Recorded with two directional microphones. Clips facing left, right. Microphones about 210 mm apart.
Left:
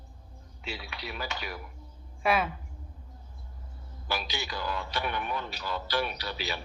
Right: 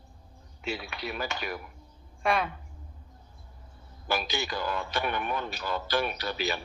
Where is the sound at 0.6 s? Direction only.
50° right (ahead or behind).